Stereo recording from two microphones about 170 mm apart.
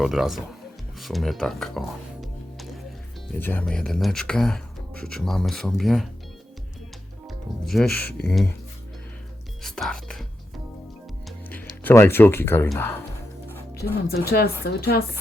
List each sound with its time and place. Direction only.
0.0 s speech: centre (ahead or behind)
3.3 s speech: 10° left (ahead or behind)
7.3 s music: centre (ahead or behind)
7.9 s speech: 10° left (ahead or behind)
9.6 s music: centre (ahead or behind)
11.4 s speech: 10° left (ahead or behind)
13.8 s a woman's voice: 65° left (ahead or behind)